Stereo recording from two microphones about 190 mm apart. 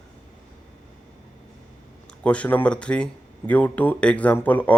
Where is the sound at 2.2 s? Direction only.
5° left (ahead or behind).